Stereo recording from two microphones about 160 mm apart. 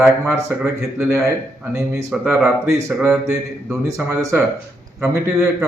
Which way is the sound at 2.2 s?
10° right (ahead or behind).